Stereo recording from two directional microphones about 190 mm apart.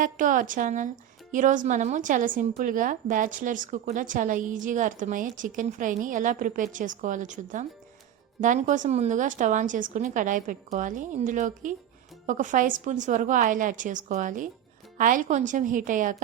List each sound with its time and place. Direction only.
0.0 s a woman's voice: 45° right (ahead or behind)